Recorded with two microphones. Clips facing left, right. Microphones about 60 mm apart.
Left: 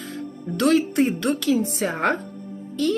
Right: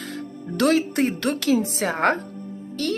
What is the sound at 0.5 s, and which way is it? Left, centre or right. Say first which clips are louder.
A woman's voice: left 1 dB; right.